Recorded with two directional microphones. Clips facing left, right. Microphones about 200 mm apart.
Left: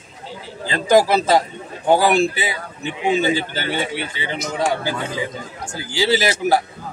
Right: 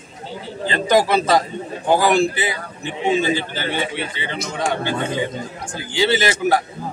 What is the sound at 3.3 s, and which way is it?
A man's voice, 25° right (ahead or behind).